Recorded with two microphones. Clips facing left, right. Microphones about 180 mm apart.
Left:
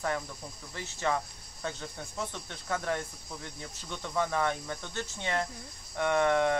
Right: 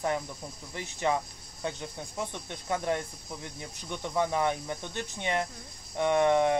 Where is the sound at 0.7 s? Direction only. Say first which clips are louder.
Right 2 dB; 15° right (ahead or behind).